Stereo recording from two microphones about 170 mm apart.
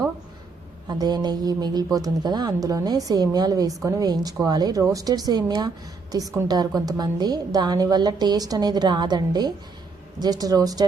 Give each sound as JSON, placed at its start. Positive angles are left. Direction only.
{"t": 0.9, "sound": "a woman's voice", "side_deg": -25}